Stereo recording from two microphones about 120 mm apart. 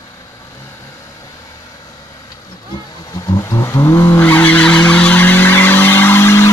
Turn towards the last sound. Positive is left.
turn(degrees=20)  # may be behind; listen again after turning